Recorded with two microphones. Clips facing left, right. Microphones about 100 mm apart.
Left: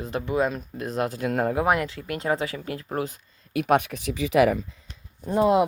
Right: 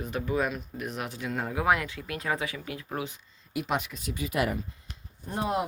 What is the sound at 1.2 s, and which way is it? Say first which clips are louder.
Speech: left 7 dB; 55° left (ahead or behind).